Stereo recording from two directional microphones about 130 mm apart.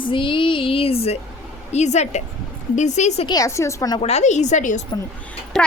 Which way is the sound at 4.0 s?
55° left (ahead or behind).